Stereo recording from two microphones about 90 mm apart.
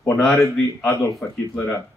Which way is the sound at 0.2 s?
5° left (ahead or behind).